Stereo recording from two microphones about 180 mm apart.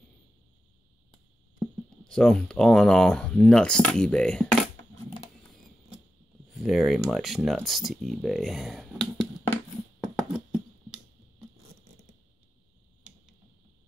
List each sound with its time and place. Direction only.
2.0 s speech: 5° left (ahead or behind)
6.5 s speech: centre (ahead or behind)
9.9 s a sound: centre (ahead or behind)